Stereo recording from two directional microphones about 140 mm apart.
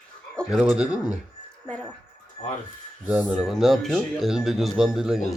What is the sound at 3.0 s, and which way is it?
Speech, 10° right (ahead or behind).